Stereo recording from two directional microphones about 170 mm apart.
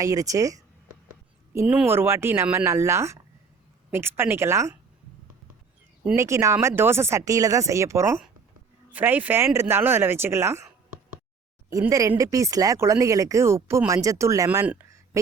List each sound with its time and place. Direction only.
0.0 s speech: 20° right (ahead or behind)
1.5 s speech: 5° right (ahead or behind)
6.1 s speech: 15° right (ahead or behind)
11.7 s speech: 20° right (ahead or behind)